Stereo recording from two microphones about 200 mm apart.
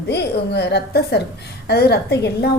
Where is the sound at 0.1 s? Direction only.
55° left (ahead or behind).